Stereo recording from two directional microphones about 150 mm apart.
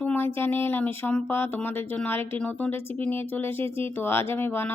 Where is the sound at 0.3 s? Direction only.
15° left (ahead or behind).